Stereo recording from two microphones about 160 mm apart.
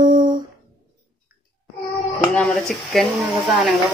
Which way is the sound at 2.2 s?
5° left (ahead or behind).